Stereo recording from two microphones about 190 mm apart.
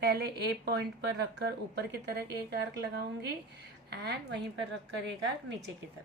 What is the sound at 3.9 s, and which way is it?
Speech, 65° right (ahead or behind).